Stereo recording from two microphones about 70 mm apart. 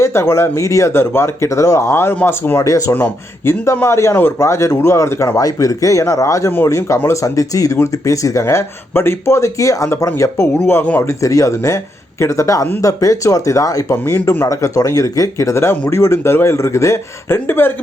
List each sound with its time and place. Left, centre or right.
0.0 s speech: left
2.6 s speech: left
2.9 s speech: left
5.4 s speech: left
13.9 s speech: left
14.4 s speech: left